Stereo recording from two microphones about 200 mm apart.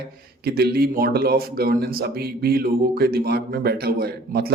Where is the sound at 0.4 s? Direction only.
50° right (ahead or behind).